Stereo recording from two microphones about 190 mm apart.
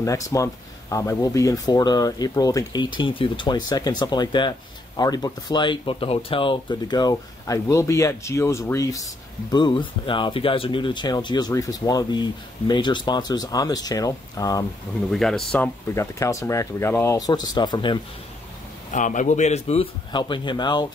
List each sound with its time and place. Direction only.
0.0 s speech: 15° left (ahead or behind)
15.0 s speech: centre (ahead or behind); by 17.9 s 25° left (ahead or behind)
18.9 s a man's voice: 40° left (ahead or behind); by 20.8 s 25° left (ahead or behind)